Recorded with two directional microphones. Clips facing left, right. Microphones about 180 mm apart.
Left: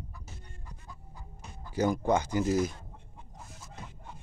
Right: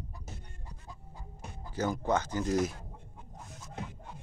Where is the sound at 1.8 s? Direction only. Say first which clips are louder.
Left 3 dB; 10° left (ahead or behind).